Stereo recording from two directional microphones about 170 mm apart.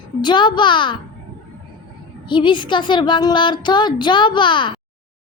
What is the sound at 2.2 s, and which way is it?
A woman's voice, 30° left (ahead or behind).